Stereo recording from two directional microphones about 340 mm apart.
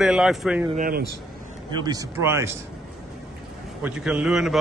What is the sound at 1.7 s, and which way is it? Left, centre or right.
Speech, centre.